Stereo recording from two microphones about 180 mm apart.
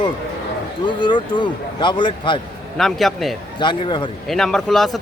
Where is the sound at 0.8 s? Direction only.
25° left (ahead or behind).